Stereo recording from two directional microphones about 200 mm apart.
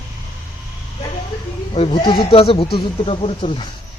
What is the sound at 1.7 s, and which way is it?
Speech, 25° left (ahead or behind).